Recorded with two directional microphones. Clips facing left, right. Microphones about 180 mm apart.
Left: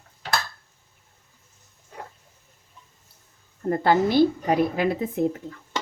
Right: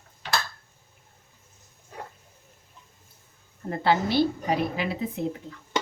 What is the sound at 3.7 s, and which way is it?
A woman's voice, 50° left (ahead or behind).